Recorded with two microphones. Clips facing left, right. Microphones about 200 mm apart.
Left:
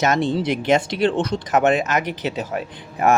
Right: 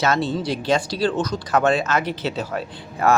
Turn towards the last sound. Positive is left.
turn(degrees=15)  # may be behind; listen again after turning